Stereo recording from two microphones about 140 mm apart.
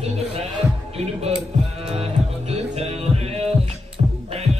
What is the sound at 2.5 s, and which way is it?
Music, 50° right (ahead or behind).